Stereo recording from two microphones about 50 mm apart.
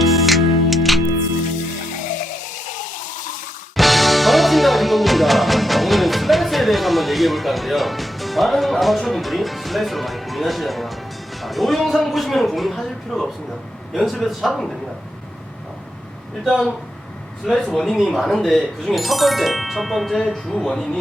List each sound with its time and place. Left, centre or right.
0.0 s music: centre
3.8 s music: centre
11.4 s speech: centre
17.4 s speech: centre